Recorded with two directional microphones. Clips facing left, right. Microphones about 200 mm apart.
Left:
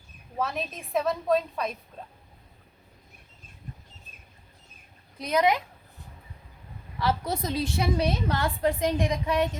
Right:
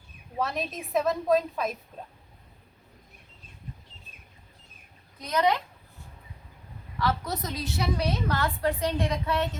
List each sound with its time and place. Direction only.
0.3 s a woman's voice: centre (ahead or behind)
5.2 s a woman's voice: 15° left (ahead or behind)
7.0 s a woman's voice: 25° left (ahead or behind)